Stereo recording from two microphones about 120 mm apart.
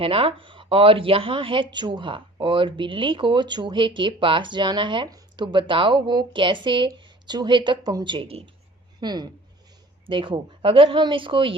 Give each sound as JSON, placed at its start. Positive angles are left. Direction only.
{"t": 0.0, "sound": "a woman's voice", "side_deg": -50}
{"t": 9.0, "sound": "speech", "side_deg": -35}